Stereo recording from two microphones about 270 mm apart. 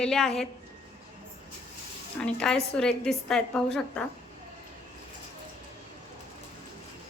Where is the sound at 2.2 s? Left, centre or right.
Centre.